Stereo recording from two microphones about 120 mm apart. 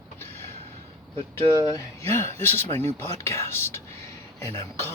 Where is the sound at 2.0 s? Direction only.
60° right (ahead or behind).